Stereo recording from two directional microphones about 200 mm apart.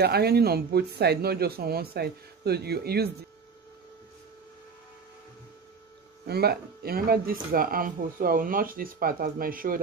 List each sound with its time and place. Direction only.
0.0 s speech: 55° right (ahead or behind)
6.2 s speech: 50° right (ahead or behind)